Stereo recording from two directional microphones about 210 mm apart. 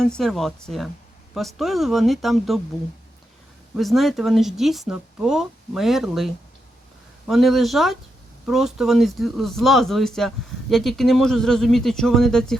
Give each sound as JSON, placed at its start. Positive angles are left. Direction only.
{"t": 0.0, "sound": "speech", "side_deg": 0}
{"t": 3.8, "sound": "speech", "side_deg": 0}